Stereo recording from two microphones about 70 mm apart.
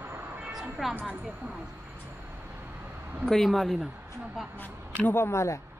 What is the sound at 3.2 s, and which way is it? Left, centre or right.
Speech, centre.